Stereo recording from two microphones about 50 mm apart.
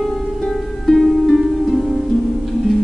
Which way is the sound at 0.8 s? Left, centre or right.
Centre.